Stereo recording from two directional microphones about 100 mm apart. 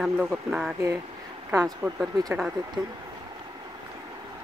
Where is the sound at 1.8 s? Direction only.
30° right (ahead or behind).